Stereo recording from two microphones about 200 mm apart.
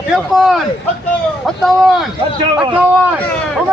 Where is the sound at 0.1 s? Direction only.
Centre (ahead or behind).